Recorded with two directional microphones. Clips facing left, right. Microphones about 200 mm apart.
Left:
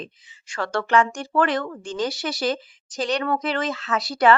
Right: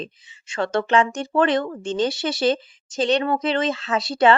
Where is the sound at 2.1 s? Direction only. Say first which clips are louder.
Right 3 dB; centre (ahead or behind).